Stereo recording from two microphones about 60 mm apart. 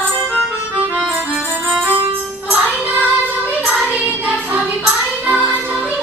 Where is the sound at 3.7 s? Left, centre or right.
Centre.